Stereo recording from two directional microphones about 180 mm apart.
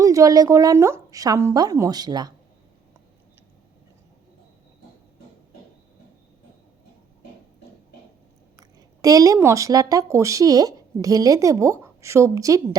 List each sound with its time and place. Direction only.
0.0 s a woman's voice: 20° right (ahead or behind)
8.5 s speech: 20° right (ahead or behind)